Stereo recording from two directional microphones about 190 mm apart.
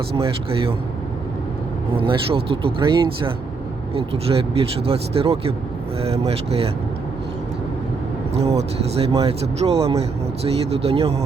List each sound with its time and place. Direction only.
0.2 s speech: 30° right (ahead or behind)
2.0 s speech: 30° right (ahead or behind)
8.4 s speech: 35° right (ahead or behind)